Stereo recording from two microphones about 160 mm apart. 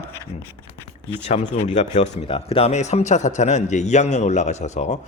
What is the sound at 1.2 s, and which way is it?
A man's voice, 40° left (ahead or behind).